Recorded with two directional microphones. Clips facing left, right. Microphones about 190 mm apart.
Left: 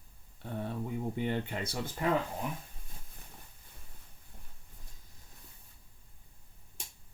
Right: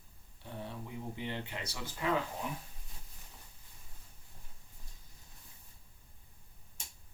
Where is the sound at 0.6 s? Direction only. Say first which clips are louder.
Left 7 dB; 50° left (ahead or behind).